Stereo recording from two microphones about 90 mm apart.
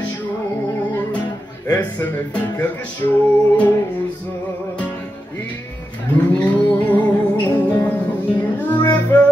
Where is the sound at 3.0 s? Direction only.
40° left (ahead or behind).